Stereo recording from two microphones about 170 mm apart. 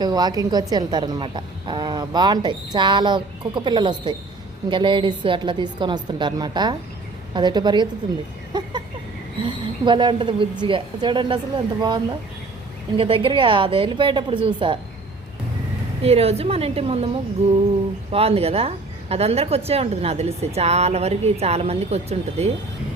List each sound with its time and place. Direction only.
0.0 s a woman's voice: 25° right (ahead or behind)
8.5 s a sound: 25° right (ahead or behind)
9.4 s a woman's voice: 30° right (ahead or behind)
13.0 s a woman's voice: 30° right (ahead or behind)
16.0 s a woman's voice: 35° right (ahead or behind)